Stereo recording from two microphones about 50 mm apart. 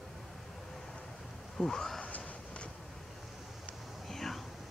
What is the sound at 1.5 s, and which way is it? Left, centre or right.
Speech, centre.